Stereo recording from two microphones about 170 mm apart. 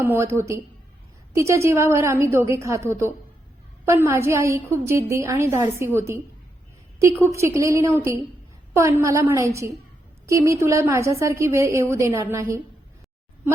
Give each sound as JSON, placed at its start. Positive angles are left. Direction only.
{"t": 0.0, "sound": "a woman's voice", "side_deg": -15}